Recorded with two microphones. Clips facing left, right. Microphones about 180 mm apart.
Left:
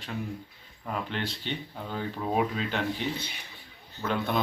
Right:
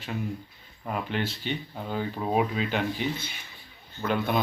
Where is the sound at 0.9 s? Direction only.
10° right (ahead or behind).